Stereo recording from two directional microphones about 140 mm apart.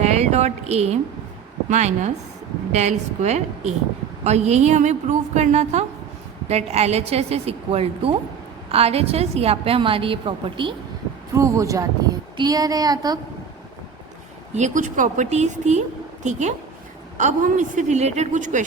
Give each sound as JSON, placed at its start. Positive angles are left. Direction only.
{"t": 0.0, "sound": "a sound", "side_deg": -50}
{"t": 1.7, "sound": "a woman's voice", "side_deg": -55}
{"t": 11.3, "sound": "a woman's voice", "side_deg": -20}
{"t": 14.5, "sound": "a woman's voice", "side_deg": -60}